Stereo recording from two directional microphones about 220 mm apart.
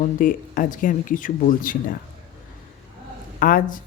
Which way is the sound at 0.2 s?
35° left (ahead or behind).